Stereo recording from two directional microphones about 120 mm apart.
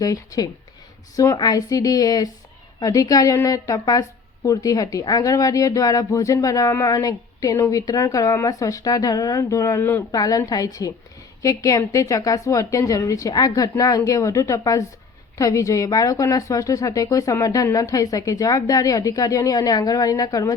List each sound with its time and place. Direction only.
0.0 s speech: 30° left (ahead or behind)